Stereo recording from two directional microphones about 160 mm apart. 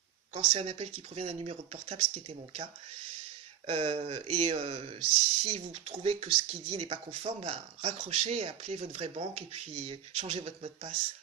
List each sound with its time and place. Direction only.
0.3 s speech: 40° right (ahead or behind)
3.7 s speech: 35° right (ahead or behind)